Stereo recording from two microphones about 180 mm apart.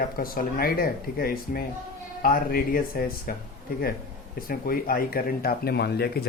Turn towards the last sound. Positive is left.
turn(degrees=60)  # may be behind; listen again after turning